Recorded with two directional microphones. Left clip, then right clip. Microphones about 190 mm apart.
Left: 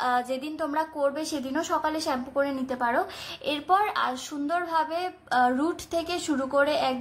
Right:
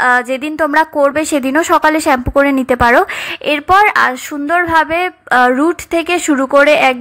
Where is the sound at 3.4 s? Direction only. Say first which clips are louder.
Right 14 dB; 25° right (ahead or behind).